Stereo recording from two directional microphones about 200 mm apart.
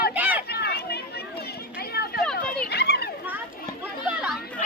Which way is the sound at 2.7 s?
55° left (ahead or behind).